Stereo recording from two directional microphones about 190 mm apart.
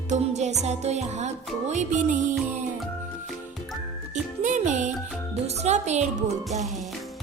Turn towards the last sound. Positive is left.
turn(degrees=-35)  # may be behind; listen again after turning